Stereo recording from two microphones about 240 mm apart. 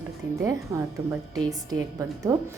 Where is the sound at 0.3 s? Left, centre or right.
Centre.